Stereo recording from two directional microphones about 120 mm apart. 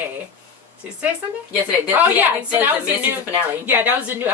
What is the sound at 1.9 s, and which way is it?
A woman's voice, 15° right (ahead or behind).